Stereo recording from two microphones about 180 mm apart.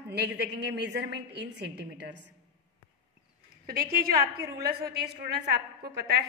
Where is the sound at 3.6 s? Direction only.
55° right (ahead or behind).